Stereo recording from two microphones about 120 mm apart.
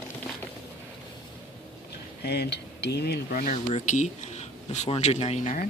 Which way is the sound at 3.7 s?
70° left (ahead or behind).